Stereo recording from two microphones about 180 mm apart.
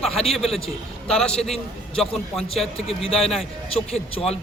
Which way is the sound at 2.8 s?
30° left (ahead or behind).